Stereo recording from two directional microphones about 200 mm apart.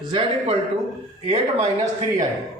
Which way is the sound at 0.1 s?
25° right (ahead or behind).